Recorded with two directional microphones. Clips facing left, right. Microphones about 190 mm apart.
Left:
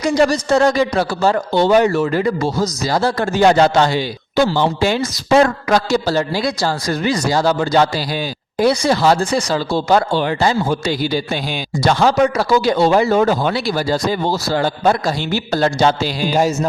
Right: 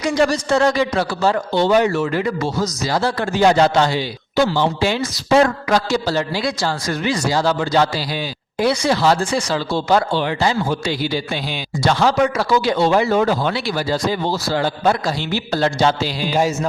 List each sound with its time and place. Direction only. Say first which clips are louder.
0.0 s speech: left 2 dB; 40° left (ahead or behind)